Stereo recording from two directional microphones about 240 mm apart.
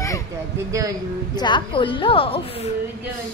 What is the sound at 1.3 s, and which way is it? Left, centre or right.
A woman's voice, centre.